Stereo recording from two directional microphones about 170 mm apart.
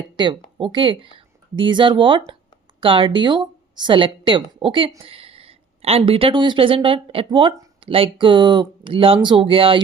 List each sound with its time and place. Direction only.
0.2 s a woman's voice: 25° right (ahead or behind)